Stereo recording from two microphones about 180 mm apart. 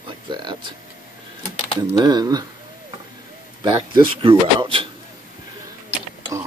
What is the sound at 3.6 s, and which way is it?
A man's voice, 30° right (ahead or behind).